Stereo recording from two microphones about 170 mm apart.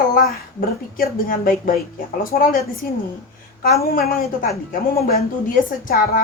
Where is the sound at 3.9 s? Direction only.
55° left (ahead or behind).